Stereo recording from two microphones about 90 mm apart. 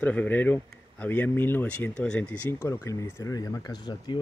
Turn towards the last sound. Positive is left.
turn(degrees=55)  # may be behind; listen again after turning